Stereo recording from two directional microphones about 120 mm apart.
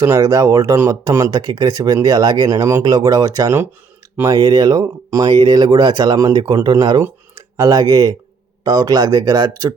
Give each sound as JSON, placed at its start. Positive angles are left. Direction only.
{"t": 0.0, "sound": "speech", "side_deg": -25}